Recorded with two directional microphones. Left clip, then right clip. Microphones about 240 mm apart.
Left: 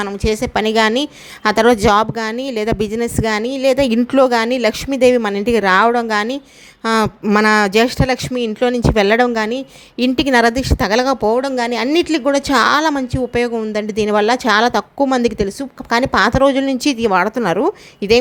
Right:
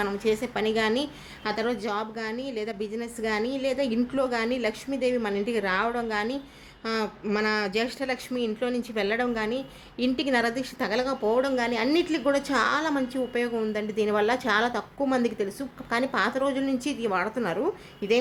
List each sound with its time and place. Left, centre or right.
0.0 s speech: left
8.3 s speech: left
10.2 s speech: left